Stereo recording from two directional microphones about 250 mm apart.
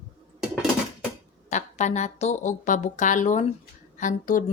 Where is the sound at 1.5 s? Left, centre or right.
Left.